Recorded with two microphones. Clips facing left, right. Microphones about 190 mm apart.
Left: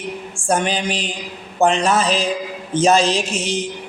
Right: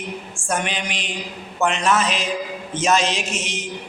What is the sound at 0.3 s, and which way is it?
A man's voice, 35° left (ahead or behind).